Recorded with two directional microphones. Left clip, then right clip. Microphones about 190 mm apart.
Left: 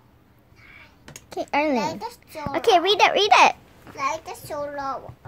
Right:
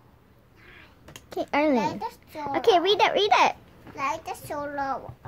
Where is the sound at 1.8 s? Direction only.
15° right (ahead or behind).